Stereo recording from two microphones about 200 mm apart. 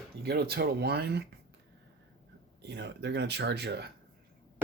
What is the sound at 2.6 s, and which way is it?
Speech, 55° right (ahead or behind).